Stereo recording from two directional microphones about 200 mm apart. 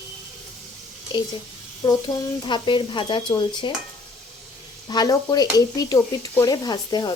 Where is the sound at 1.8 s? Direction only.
20° left (ahead or behind).